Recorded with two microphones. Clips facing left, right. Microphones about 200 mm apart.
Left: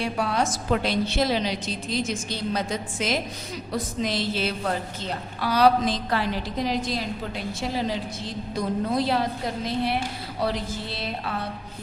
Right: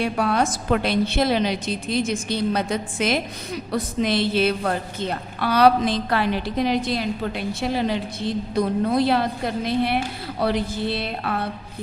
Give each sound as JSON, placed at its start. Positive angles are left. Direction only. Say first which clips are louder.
{"t": 0.0, "sound": "a woman's voice", "louder": "right 4 dB", "side_deg": -55}